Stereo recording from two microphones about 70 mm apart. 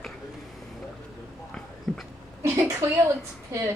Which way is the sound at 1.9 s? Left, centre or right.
Centre.